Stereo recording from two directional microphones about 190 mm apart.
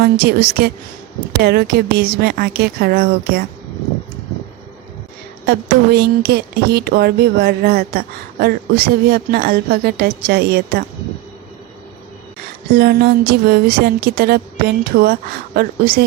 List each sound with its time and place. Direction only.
0.0 s speech: 55° right (ahead or behind)
5.5 s speech: 60° right (ahead or behind)
12.7 s speech: 60° right (ahead or behind)